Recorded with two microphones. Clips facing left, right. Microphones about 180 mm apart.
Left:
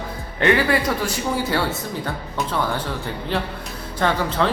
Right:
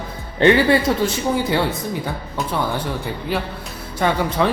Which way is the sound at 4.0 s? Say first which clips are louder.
Right 2 dB; 15° right (ahead or behind).